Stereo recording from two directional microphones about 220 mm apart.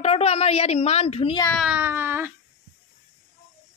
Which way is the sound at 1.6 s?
10° right (ahead or behind).